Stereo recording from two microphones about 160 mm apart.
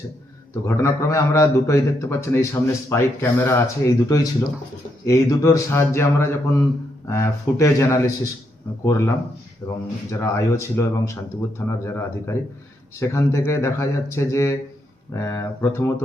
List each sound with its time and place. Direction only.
0.6 s a man's voice: 20° left (ahead or behind)